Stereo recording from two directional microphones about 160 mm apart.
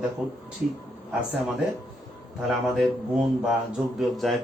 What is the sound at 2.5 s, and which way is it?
Speech, centre (ahead or behind).